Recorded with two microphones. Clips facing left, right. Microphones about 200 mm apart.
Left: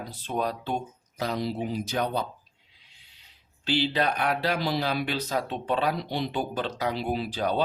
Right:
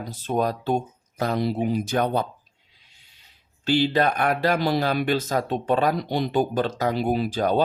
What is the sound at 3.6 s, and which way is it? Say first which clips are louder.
Speech: right 5 dB; 45° right (ahead or behind).